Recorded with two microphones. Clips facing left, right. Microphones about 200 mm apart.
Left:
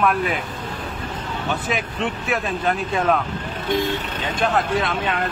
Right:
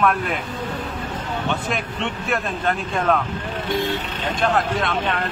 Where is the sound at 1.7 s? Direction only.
Centre (ahead or behind).